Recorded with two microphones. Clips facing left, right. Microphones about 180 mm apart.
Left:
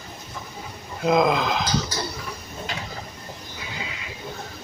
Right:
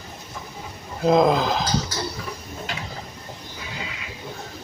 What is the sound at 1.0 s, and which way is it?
Speech, 30° right (ahead or behind).